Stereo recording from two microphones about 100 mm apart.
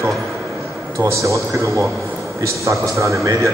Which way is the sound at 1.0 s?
30° right (ahead or behind).